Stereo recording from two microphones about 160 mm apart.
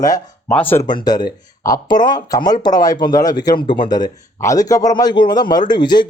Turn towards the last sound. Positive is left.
turn(degrees=30)  # may be behind; listen again after turning